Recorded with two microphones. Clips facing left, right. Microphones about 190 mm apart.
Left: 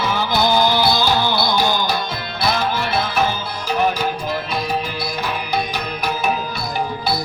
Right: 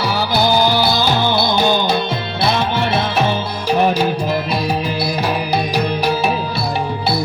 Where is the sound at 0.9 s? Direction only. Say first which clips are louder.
Right 2 dB; 20° right (ahead or behind).